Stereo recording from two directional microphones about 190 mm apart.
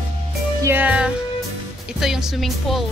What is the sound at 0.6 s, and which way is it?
Speech, 10° right (ahead or behind).